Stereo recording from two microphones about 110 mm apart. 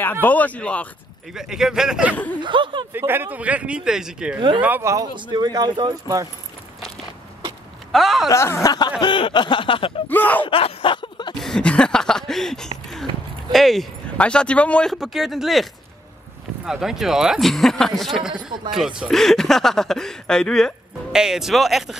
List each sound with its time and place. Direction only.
0.0 s speech: 15° left (ahead or behind)
1.3 s speech: 5° right (ahead or behind)
2.4 s speech: 45° right (ahead or behind)
2.9 s speech: 20° right (ahead or behind)
5.1 s speech: 40° right (ahead or behind)
7.9 s speech: centre (ahead or behind)
8.3 s a sound: 25° left (ahead or behind)
9.0 s a sound: 45° left (ahead or behind)
10.0 s speech: 15° left (ahead or behind)
10.4 s a sound: 55° left (ahead or behind)
11.4 s a sound: 5° left (ahead or behind)
13.5 s speech: centre (ahead or behind)
16.6 s speech: 5° right (ahead or behind)
21.1 s speech: 5° right (ahead or behind)